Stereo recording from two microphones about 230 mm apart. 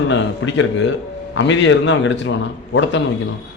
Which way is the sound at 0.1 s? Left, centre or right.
Left.